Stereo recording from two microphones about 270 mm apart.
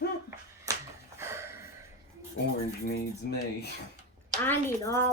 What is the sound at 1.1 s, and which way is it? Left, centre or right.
Snort, centre.